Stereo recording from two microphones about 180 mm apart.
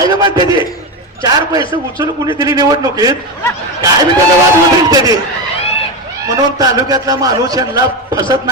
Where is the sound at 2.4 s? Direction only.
20° right (ahead or behind).